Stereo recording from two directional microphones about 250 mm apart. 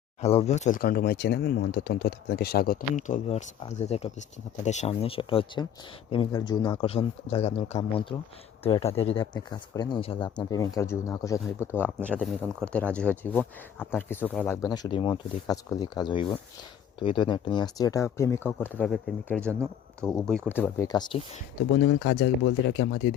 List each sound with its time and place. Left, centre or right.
0.2 s speech: left
21.9 s speech: left